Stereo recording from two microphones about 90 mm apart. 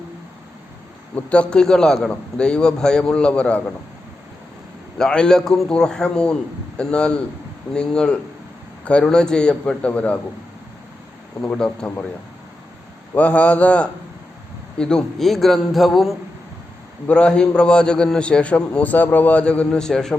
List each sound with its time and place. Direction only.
1.1 s a man's voice: 15° left (ahead or behind)
4.9 s a man's voice: 10° left (ahead or behind)
11.5 s a man's voice: 10° left (ahead or behind)
13.1 s a man's voice: 15° left (ahead or behind); by 16.1 s centre (ahead or behind)
17.1 s a man's voice: 10° left (ahead or behind)